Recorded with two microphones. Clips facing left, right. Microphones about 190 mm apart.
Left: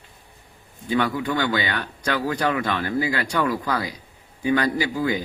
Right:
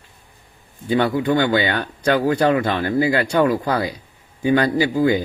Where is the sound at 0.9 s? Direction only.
30° right (ahead or behind).